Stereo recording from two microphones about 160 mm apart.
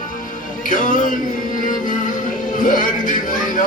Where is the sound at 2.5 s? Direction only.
55° left (ahead or behind).